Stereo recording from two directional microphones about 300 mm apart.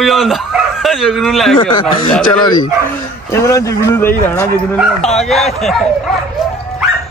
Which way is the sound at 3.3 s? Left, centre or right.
Centre.